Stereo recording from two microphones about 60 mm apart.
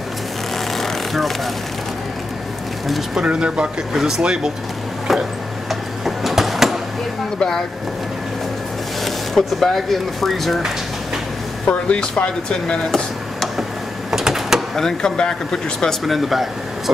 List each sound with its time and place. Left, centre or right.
0.7 s vehicle: centre
3.2 s speech: centre
5.7 s a sound: centre
7.3 s speech: centre
9.0 s speech: centre
11.6 s speech: left
14.1 s a sound: centre
14.8 s speech: centre
16.1 s speech: centre